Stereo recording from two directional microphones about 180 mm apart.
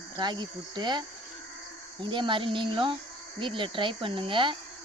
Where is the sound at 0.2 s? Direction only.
25° right (ahead or behind).